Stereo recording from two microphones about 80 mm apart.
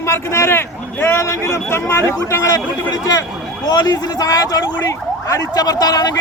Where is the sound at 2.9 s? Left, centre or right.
Left.